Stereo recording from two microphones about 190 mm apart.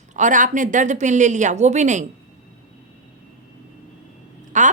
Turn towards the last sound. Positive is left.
turn(degrees=-40)  # may be behind; listen again after turning